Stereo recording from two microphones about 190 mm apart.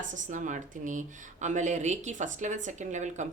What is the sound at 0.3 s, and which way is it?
Speech, 40° right (ahead or behind).